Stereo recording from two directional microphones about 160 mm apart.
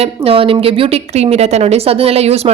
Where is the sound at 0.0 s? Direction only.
35° right (ahead or behind).